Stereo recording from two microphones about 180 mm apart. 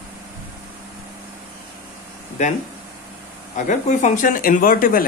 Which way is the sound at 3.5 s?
45° left (ahead or behind).